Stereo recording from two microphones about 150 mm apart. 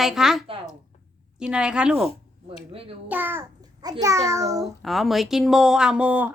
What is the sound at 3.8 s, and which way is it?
Speech, 25° right (ahead or behind).